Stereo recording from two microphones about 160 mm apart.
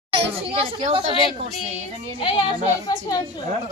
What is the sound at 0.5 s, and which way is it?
Speech, 35° right (ahead or behind).